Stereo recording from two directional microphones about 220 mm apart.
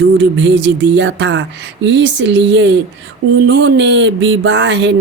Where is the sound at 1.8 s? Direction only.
55° right (ahead or behind).